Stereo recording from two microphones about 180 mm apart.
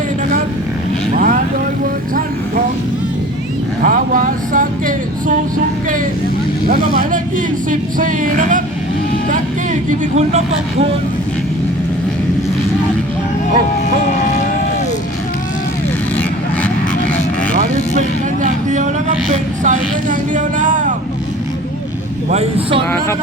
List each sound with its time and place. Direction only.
1.1 s vehicle: 45° right (ahead or behind)
3.8 s a sound: 50° right (ahead or behind)
6.7 s vehicle: 45° right (ahead or behind)
10.2 s speech: 40° right (ahead or behind)
19.6 s vehicle: 45° right (ahead or behind)
22.3 s speech: 35° right (ahead or behind)